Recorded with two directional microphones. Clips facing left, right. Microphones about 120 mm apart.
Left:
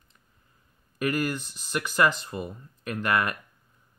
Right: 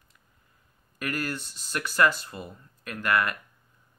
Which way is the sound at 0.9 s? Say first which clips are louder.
Left 5 dB; 15° left (ahead or behind).